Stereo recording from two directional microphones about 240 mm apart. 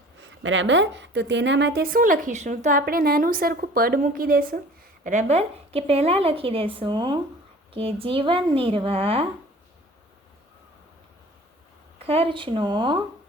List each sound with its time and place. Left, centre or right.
0.2 s a woman's voice: right
11.9 s a woman's voice: right